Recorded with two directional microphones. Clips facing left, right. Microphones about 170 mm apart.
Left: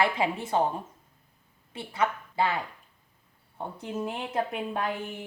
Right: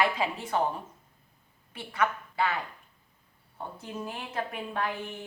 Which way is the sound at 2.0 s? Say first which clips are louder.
Left 1 dB; 25° left (ahead or behind).